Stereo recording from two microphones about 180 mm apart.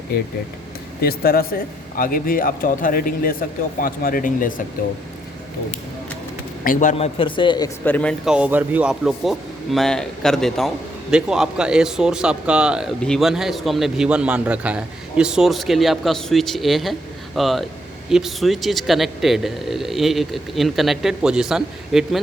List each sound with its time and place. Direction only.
1.0 s speech: 55° left (ahead or behind)
6.7 s speech: 45° left (ahead or behind)
6.9 s speech: 30° left (ahead or behind)
7.9 s speech: 10° left (ahead or behind)
8.2 s a man's voice: 5° right (ahead or behind)